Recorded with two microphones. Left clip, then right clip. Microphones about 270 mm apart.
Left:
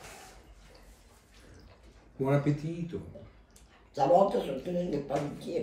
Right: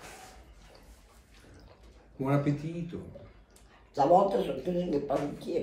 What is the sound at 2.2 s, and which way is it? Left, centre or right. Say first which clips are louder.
Speech: left 1 dB; centre.